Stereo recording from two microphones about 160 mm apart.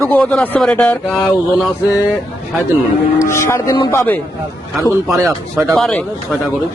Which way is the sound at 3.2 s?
15° left (ahead or behind).